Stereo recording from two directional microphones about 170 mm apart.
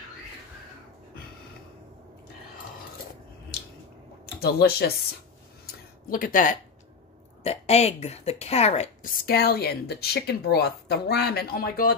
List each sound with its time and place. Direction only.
4.4 s speech: 65° left (ahead or behind)
6.0 s speech: 55° left (ahead or behind)
7.4 s a woman's voice: 40° left (ahead or behind)
9.2 s speech: 65° left (ahead or behind)